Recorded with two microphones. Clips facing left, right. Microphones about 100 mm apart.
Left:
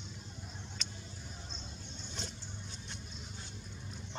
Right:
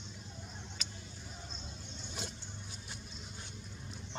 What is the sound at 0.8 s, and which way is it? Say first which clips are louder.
Vehicle: left 1 dB; 5° right (ahead or behind).